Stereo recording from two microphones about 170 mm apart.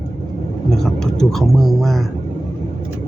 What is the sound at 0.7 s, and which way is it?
Speech, 5° left (ahead or behind).